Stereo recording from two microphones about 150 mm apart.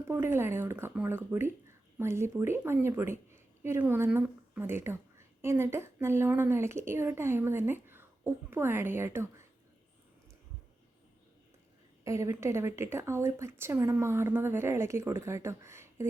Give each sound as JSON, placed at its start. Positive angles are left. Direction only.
{"t": 0.1, "sound": "a woman's voice", "side_deg": -15}
{"t": 12.0, "sound": "a woman's voice", "side_deg": -20}